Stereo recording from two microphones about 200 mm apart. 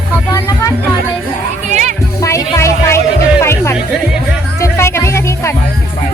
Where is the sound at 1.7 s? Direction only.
35° right (ahead or behind).